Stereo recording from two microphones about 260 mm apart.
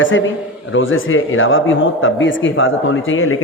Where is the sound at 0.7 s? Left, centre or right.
Left.